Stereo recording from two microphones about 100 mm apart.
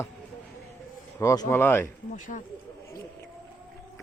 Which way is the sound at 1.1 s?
30° left (ahead or behind).